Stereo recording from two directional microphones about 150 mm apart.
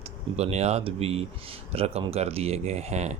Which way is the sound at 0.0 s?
45° right (ahead or behind).